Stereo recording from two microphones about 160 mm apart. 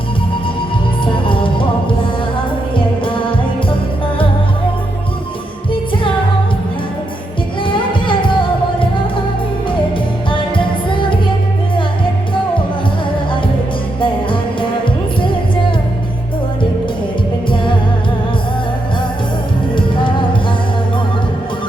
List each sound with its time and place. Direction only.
1.0 s music: 30° left (ahead or behind)
2.7 s music: 30° left (ahead or behind)
7.6 s music: 30° left (ahead or behind)
10.2 s music: 30° left (ahead or behind)
14.0 s music: 30° left (ahead or behind)
17.5 s music: 30° left (ahead or behind)
19.7 s music: 30° left (ahead or behind)